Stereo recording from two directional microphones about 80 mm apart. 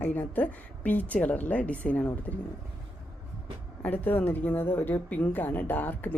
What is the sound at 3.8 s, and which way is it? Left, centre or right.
A woman's voice, left.